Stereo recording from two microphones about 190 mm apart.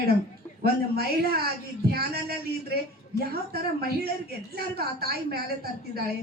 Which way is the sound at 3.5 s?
55° right (ahead or behind).